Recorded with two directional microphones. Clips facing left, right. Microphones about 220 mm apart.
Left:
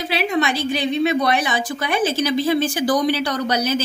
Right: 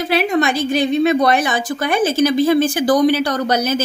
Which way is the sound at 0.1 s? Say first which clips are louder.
Right 4 dB; 50° right (ahead or behind).